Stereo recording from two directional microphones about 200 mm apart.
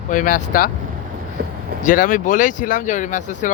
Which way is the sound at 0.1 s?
40° left (ahead or behind).